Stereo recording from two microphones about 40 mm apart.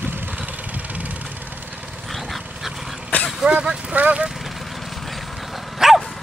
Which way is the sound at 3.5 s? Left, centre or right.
Right.